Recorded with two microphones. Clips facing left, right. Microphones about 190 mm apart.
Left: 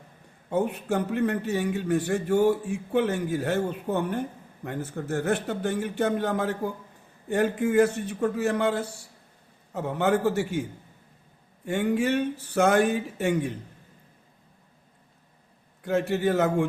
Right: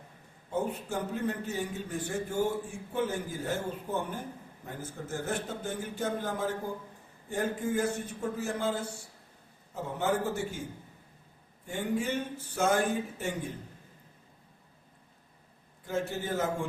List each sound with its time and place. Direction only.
0.5 s a man's voice: 70° left (ahead or behind)
15.8 s a man's voice: 70° left (ahead or behind)